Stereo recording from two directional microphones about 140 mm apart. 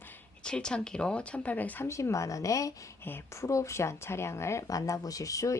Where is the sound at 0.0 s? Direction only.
15° left (ahead or behind).